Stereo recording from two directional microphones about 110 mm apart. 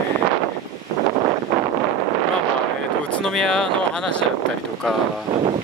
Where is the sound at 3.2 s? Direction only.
5° left (ahead or behind).